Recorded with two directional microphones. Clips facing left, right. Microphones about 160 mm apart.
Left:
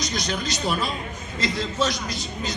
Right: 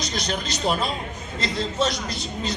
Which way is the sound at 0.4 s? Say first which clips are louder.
Right 3 dB; 25° right (ahead or behind).